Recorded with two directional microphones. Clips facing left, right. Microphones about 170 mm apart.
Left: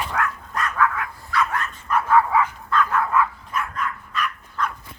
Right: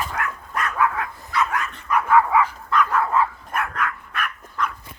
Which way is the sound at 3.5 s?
65° right (ahead or behind).